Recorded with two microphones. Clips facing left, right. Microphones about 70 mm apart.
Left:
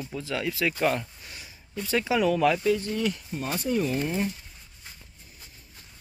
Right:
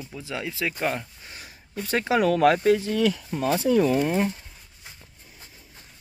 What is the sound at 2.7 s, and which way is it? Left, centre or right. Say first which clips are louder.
Speech: right 5 dB; right.